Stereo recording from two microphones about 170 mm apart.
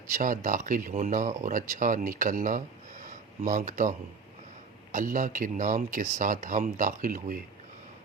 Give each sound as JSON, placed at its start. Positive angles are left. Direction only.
{"t": 0.1, "sound": "speech", "side_deg": -50}